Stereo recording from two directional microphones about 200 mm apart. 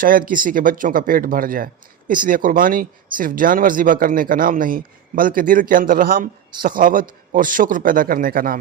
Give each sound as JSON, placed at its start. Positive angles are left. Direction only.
{"t": 0.0, "sound": "speech", "side_deg": -45}